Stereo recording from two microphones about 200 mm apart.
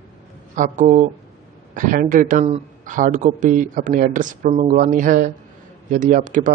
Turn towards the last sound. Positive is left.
turn(degrees=-40)  # may be behind; listen again after turning